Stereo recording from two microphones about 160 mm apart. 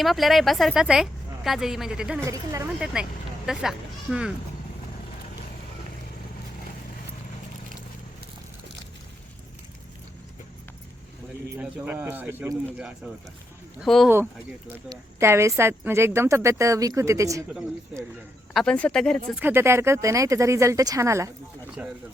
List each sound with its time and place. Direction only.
0.0 s speech: centre (ahead or behind)
2.2 s speech: 20° right (ahead or behind)
2.8 s speech: 5° right (ahead or behind)
11.5 s speech: 10° right (ahead or behind)
13.7 s speech: centre (ahead or behind)
14.8 s speech: 15° right (ahead or behind)
18.5 s speech: 5° left (ahead or behind)
19.4 s speech: 15° right (ahead or behind)